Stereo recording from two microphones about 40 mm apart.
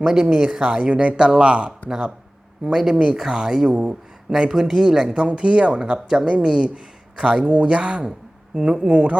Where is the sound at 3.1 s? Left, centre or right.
Centre.